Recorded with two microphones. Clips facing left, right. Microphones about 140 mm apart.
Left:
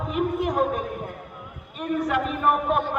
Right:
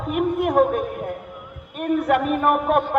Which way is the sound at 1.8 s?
55° right (ahead or behind).